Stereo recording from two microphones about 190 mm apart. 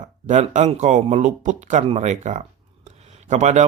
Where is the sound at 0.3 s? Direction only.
40° right (ahead or behind).